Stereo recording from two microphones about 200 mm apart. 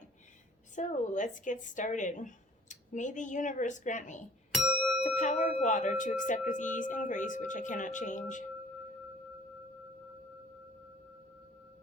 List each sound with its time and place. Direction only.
0.8 s speech: 40° left (ahead or behind)
4.5 s music: centre (ahead or behind)
5.1 s speech: 35° left (ahead or behind)